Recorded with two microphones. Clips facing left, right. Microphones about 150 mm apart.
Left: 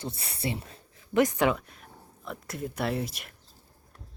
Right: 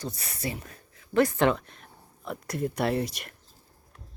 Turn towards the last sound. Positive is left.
turn(degrees=0)  # may be behind; listen again after turning